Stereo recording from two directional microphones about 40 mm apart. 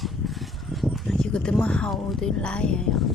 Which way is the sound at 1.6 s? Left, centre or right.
Left.